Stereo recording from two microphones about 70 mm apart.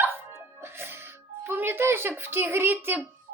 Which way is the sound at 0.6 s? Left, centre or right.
Right.